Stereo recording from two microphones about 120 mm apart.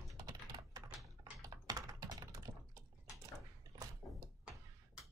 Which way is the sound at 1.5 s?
30° right (ahead or behind).